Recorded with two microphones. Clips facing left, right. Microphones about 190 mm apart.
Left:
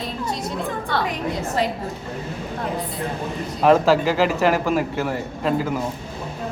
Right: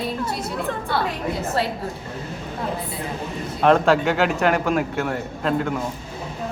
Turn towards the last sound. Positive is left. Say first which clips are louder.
# left 1 dB
turn(degrees=5)  # may be behind; listen again after turning